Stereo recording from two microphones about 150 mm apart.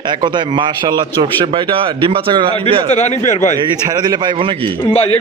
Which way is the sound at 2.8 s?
45° left (ahead or behind).